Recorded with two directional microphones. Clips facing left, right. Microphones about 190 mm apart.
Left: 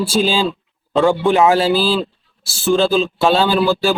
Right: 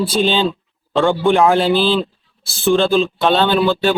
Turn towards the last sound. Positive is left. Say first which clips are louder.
# even
turn(degrees=5)  # may be behind; listen again after turning